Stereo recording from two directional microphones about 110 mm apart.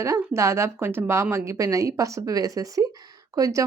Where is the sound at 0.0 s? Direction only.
25° right (ahead or behind).